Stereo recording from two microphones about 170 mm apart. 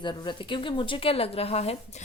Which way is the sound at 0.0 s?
25° left (ahead or behind).